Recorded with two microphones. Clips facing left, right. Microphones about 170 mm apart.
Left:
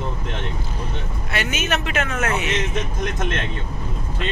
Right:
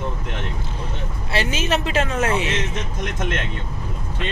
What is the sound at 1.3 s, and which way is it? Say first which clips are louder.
Speech: right 2 dB; 30° right (ahead or behind).